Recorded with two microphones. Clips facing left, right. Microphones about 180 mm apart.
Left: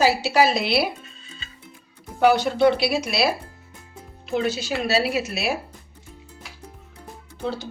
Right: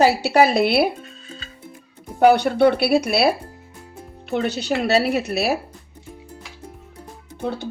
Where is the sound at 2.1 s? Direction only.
60° right (ahead or behind).